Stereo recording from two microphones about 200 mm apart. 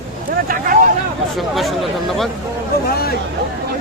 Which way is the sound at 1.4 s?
Centre (ahead or behind).